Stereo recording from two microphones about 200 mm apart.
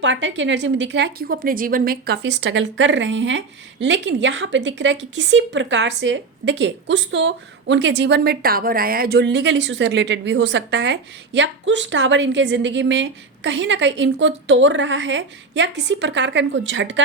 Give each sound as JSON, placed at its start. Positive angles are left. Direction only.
{"t": 0.0, "sound": "a woman's voice", "side_deg": -65}